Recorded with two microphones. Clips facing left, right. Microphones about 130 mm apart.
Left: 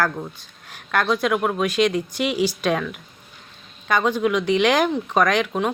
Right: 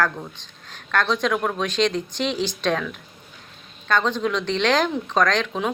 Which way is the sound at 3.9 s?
10° left (ahead or behind).